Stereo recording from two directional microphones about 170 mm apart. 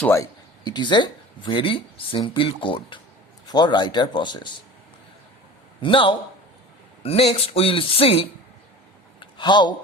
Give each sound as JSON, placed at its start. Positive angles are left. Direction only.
{"t": 0.0, "sound": "speech", "side_deg": 15}
{"t": 5.8, "sound": "speech", "side_deg": 30}